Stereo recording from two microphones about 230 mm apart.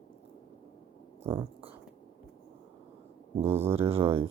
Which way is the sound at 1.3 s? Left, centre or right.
Right.